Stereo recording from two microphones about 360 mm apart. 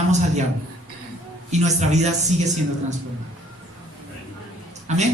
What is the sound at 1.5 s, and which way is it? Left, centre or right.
Speech, centre.